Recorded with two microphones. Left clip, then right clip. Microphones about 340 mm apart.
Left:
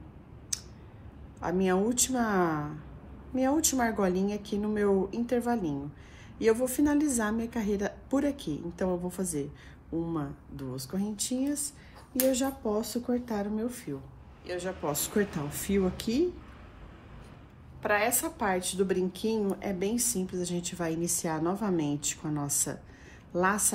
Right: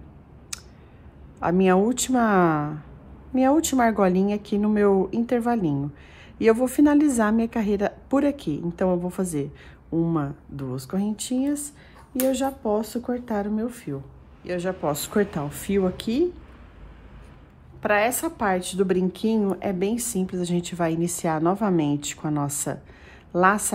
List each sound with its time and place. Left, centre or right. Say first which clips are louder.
1.4 s a woman's voice: right 8 dB; right
17.8 s a woman's voice: right 6 dB; right